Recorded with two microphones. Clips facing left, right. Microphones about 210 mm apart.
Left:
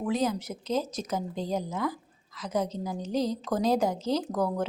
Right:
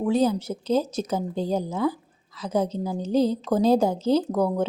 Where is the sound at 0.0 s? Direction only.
30° right (ahead or behind).